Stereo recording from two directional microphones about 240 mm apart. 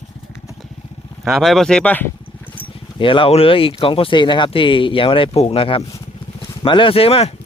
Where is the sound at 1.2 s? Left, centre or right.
Centre.